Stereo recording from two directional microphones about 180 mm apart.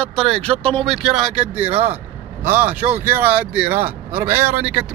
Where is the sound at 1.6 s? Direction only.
35° right (ahead or behind).